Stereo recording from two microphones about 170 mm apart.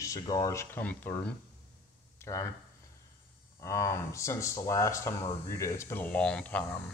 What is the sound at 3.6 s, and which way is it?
Speech, 15° left (ahead or behind).